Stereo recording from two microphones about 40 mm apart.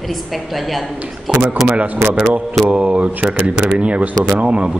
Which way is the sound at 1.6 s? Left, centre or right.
Right.